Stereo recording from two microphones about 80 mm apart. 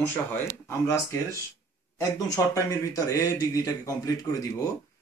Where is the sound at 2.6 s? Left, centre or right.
Left.